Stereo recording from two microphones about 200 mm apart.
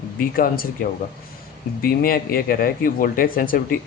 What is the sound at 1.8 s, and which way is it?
Speech, 45° left (ahead or behind).